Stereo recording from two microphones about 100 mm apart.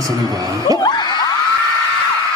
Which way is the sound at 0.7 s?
45° left (ahead or behind).